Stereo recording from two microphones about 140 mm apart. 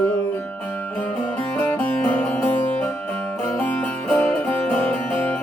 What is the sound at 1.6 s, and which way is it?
Music, 10° left (ahead or behind).